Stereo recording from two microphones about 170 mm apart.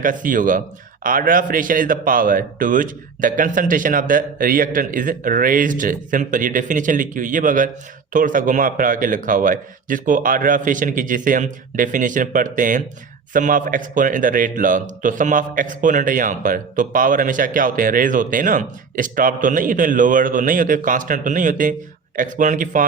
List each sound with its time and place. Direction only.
0.0 s a man's voice: 50° right (ahead or behind)